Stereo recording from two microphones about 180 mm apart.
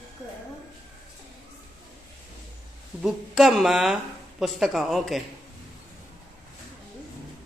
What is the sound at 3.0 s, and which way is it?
Speech, 5° right (ahead or behind).